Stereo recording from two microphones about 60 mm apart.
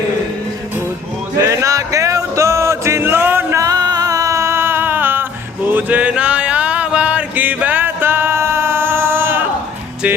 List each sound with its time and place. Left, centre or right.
1.4 s music: right
3.0 s music: right
3.5 s music: right
5.6 s a sound: right